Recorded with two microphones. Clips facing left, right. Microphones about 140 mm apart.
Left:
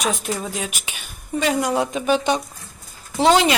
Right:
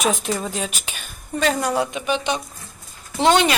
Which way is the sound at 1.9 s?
40° left (ahead or behind).